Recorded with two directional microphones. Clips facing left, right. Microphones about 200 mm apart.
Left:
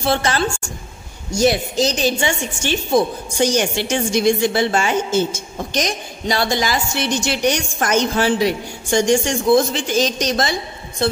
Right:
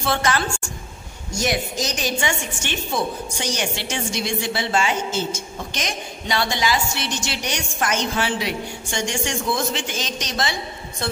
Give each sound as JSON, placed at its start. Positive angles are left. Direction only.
{"t": 0.0, "sound": "a woman's voice", "side_deg": 30}